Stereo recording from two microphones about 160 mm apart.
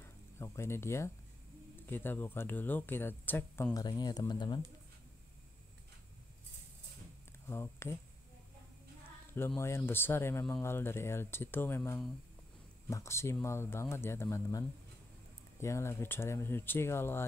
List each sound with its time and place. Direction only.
0.0 s speech: 15° left (ahead or behind)
3.8 s speech: 25° left (ahead or behind)
7.4 s speech: 15° left (ahead or behind)
9.6 s speech: 15° left (ahead or behind)
15.6 s speech: 15° left (ahead or behind)